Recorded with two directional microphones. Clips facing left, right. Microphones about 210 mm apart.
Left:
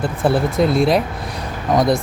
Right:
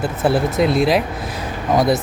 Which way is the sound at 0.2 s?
Centre (ahead or behind).